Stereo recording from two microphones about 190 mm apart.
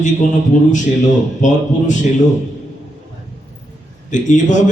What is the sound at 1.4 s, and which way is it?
Speech, 40° left (ahead or behind).